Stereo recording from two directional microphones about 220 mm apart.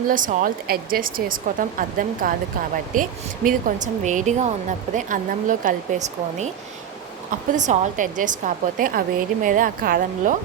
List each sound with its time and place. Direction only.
0.1 s a woman's voice: 35° right (ahead or behind)
7.5 s a woman's voice: 35° right (ahead or behind)